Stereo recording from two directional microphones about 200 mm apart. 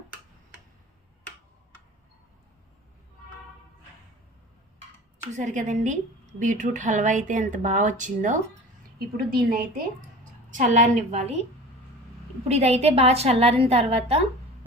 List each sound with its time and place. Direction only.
5.3 s a woman's voice: 35° right (ahead or behind)
10.5 s speech: 35° right (ahead or behind)
12.5 s speech: 30° right (ahead or behind)